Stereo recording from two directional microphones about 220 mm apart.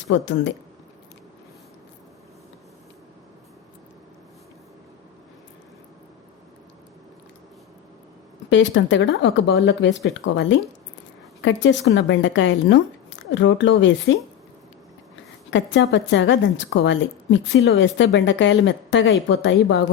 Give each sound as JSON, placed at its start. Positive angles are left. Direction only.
{"t": 0.1, "sound": "a woman's voice", "side_deg": 55}
{"t": 8.4, "sound": "a woman's voice", "side_deg": 55}
{"t": 15.4, "sound": "a woman's voice", "side_deg": 55}